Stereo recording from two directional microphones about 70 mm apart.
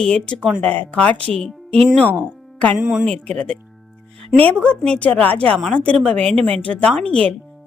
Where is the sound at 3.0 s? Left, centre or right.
Centre.